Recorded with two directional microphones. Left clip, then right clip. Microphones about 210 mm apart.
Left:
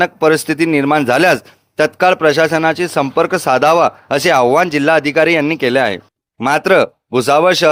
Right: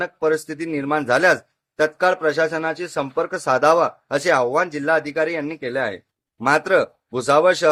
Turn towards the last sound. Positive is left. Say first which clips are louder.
# left 5 dB
turn(degrees=40)  # may be behind; listen again after turning